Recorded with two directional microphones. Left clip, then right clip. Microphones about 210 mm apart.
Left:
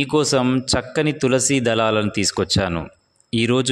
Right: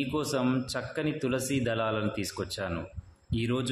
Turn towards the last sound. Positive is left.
turn(degrees=45)  # may be behind; listen again after turning